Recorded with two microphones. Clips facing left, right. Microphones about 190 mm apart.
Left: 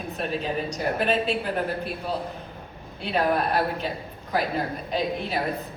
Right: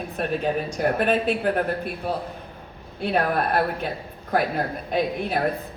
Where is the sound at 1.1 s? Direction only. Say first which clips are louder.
Right 3 dB; 55° right (ahead or behind).